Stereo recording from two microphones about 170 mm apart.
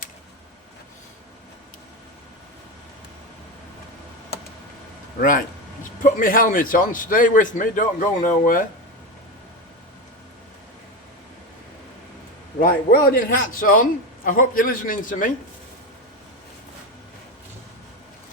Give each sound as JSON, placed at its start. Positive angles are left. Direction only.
{"t": 6.0, "sound": "a man's voice", "side_deg": 55}
{"t": 12.5, "sound": "a man's voice", "side_deg": 60}